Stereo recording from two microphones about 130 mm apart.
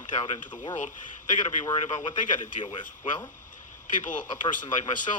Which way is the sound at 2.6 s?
40° left (ahead or behind).